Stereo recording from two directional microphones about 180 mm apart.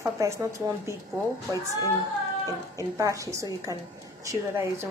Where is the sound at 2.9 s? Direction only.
20° right (ahead or behind).